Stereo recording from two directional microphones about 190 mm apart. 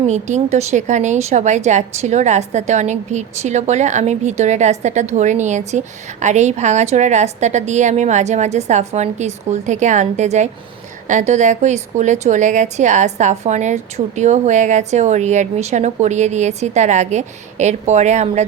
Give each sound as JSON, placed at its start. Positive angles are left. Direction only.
{"t": 0.1, "sound": "a woman's voice", "side_deg": -35}